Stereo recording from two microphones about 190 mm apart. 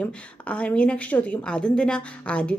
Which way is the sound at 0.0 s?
5° left (ahead or behind).